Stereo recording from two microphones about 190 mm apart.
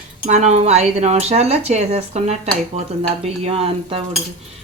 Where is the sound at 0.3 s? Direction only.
35° right (ahead or behind).